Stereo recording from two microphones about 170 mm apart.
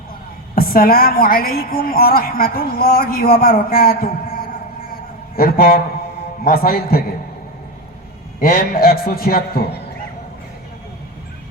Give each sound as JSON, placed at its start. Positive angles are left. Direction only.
{"t": 0.5, "sound": "a woman's voice", "side_deg": 60}
{"t": 8.4, "sound": "a woman's voice", "side_deg": 65}